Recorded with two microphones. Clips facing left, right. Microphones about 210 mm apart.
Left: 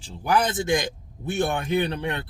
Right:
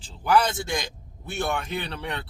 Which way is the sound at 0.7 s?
50° left (ahead or behind).